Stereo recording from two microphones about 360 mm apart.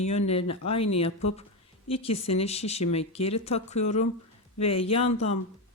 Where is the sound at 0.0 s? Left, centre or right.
Centre.